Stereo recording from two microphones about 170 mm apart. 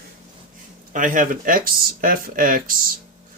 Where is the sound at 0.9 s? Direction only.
50° right (ahead or behind).